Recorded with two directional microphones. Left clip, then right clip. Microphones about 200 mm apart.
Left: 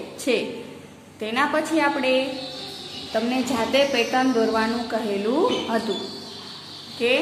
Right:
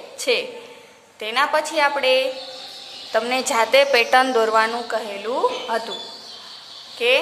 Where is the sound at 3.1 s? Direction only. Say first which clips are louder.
Right 4 dB; 40° right (ahead or behind).